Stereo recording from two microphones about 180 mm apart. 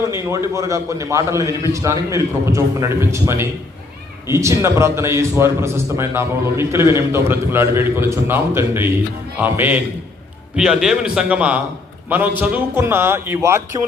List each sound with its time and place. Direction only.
0.1 s a man's voice: 15° right (ahead or behind)